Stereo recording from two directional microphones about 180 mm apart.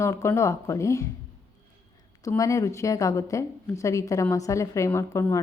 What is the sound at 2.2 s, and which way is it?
A woman's voice, 20° left (ahead or behind).